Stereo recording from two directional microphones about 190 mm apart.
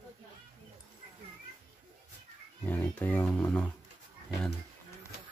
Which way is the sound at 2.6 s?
10° left (ahead or behind).